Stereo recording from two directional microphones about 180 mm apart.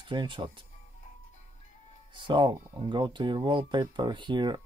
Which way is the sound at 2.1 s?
25° right (ahead or behind).